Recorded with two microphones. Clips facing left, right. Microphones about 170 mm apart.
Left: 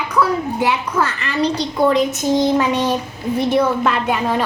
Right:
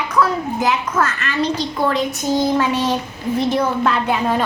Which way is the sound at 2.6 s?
15° left (ahead or behind).